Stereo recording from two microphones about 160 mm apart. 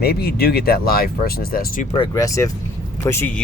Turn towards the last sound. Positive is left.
turn(degrees=15)  # may be behind; listen again after turning